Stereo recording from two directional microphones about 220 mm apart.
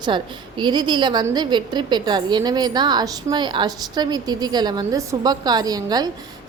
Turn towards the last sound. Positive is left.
turn(degrees=-15)  # may be behind; listen again after turning